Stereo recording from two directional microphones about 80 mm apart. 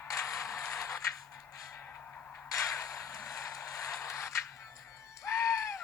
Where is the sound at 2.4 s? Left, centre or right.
Left.